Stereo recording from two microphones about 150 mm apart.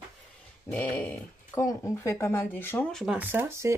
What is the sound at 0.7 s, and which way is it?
Speech, 10° left (ahead or behind).